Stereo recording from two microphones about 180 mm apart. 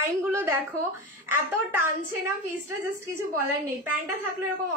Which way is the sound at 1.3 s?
10° right (ahead or behind).